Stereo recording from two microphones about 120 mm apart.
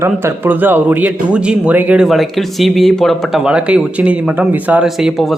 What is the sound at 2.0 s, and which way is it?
Speech, centre (ahead or behind).